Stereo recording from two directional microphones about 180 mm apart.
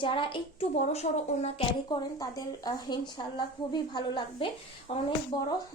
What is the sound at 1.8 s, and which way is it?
A woman's voice, 20° left (ahead or behind).